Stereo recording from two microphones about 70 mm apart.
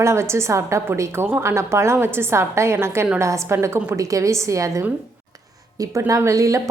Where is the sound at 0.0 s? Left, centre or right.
Right.